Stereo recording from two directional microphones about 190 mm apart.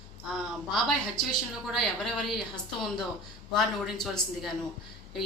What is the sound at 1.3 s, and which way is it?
A woman's voice, centre (ahead or behind).